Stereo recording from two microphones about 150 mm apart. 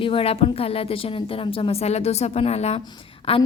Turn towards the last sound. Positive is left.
turn(degrees=40)  # may be behind; listen again after turning